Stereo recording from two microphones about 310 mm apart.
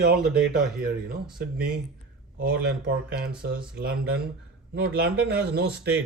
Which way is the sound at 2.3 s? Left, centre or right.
Right.